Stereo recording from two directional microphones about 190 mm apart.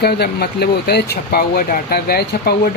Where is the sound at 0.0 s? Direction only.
55° left (ahead or behind).